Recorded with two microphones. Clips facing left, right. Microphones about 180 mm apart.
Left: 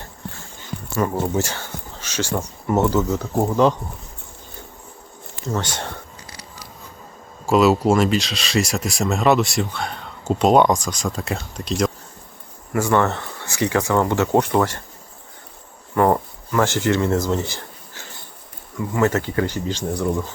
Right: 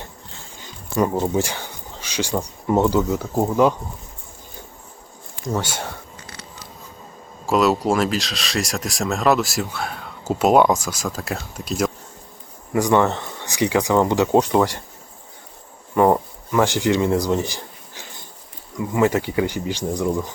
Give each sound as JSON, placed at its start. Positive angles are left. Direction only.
{"t": 0.6, "sound": "a sound", "side_deg": -15}
{"t": 1.3, "sound": "speech", "side_deg": -15}
{"t": 5.4, "sound": "speech", "side_deg": -10}
{"t": 7.4, "sound": "speech", "side_deg": 0}
{"t": 12.7, "sound": "speech", "side_deg": -15}
{"t": 16.0, "sound": "a sound", "side_deg": -15}
{"t": 18.9, "sound": "speech", "side_deg": -15}